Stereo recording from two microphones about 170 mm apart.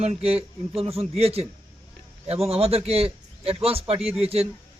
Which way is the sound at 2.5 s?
35° right (ahead or behind).